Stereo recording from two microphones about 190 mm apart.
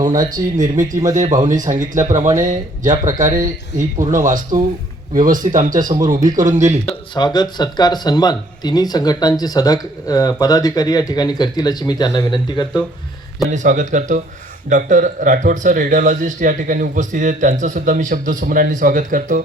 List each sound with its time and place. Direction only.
0.1 s speech: 20° right (ahead or behind)
0.5 s speech: 40° right (ahead or behind)
7.1 s speech: 20° left (ahead or behind)
13.5 s speech: 40° right (ahead or behind)